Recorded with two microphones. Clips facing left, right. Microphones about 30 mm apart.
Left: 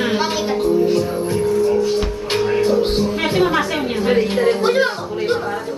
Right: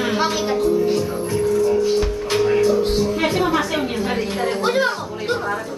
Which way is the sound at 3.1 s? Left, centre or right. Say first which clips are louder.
Left 2 dB; left.